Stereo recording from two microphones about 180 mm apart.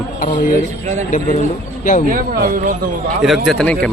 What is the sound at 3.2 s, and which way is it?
Speech, centre (ahead or behind).